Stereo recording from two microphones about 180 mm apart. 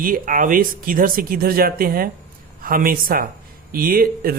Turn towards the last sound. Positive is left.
turn(degrees=-55)  # may be behind; listen again after turning